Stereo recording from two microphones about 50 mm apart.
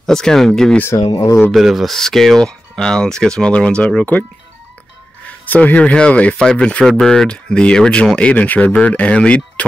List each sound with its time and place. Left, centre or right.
0.0 s speech: centre
0.8 s speech: left
1.5 s speech: centre
1.9 s speech: centre
5.2 s speech: left
6.9 s speech: centre